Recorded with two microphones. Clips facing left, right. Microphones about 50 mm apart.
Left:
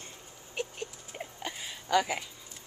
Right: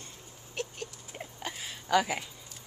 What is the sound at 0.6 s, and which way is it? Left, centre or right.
Rodents, centre.